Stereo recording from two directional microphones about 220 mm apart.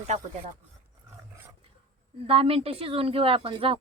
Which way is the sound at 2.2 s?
25° right (ahead or behind).